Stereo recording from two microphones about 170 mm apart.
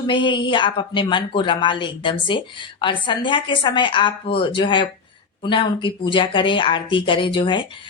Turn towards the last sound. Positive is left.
turn(degrees=30)  # may be behind; listen again after turning